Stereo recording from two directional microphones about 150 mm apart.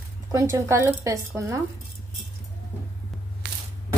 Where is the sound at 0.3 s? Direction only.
20° right (ahead or behind).